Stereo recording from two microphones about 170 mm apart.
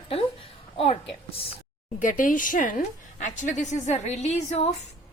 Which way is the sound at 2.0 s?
50° left (ahead or behind).